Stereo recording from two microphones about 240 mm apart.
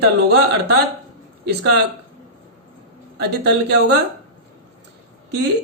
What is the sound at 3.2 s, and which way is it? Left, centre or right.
Speech, right.